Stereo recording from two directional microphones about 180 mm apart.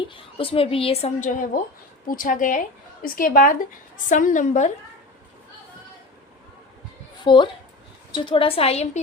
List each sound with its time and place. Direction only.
0.0 s a woman's voice: 30° left (ahead or behind)
1.2 s speech: 45° left (ahead or behind)
7.3 s a woman's voice: 25° left (ahead or behind)